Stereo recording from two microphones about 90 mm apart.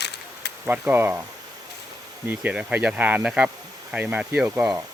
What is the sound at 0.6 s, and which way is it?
Speech, 20° right (ahead or behind).